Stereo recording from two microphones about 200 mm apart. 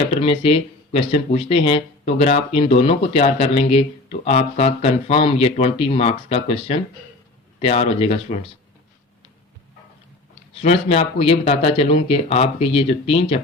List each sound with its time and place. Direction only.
0.1 s speech: 30° left (ahead or behind)
10.6 s speech: 30° left (ahead or behind)